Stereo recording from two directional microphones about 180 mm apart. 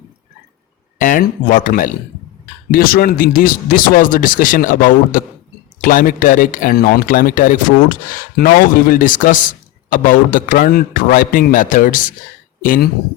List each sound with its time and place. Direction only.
0.9 s speech: 50° left (ahead or behind)